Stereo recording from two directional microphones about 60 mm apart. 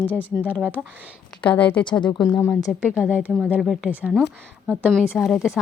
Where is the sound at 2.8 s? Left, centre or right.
Right.